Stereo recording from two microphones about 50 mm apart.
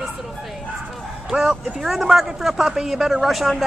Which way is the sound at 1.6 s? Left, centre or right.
Centre.